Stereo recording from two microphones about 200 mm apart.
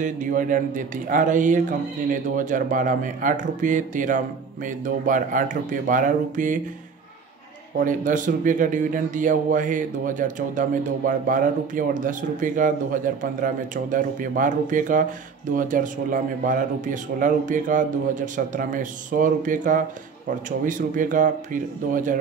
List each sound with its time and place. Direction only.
0.0 s a man's voice: 40° right (ahead or behind)
7.8 s a man's voice: 40° right (ahead or behind)